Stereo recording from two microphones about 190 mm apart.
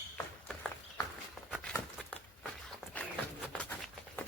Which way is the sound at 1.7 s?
5° left (ahead or behind).